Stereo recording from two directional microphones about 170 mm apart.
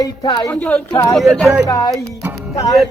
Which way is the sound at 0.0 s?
25° left (ahead or behind).